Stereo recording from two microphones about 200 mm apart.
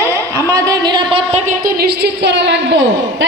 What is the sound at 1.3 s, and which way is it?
Speech, 40° right (ahead or behind).